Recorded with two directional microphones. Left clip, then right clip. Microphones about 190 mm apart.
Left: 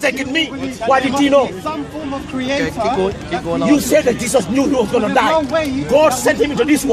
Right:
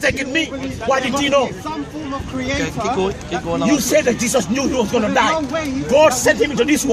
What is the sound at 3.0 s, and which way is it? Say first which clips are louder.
Speech: left 2 dB; 5° right (ahead or behind).